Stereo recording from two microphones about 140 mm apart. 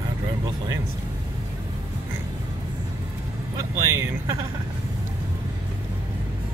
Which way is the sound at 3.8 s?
20° right (ahead or behind).